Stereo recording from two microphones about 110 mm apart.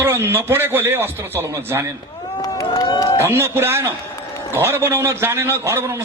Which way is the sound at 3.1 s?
25° right (ahead or behind).